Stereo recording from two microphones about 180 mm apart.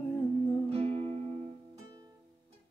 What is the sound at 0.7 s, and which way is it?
Music, 30° right (ahead or behind).